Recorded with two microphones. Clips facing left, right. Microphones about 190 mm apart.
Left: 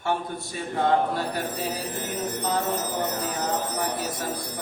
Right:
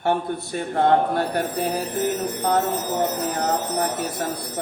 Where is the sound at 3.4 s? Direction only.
60° right (ahead or behind).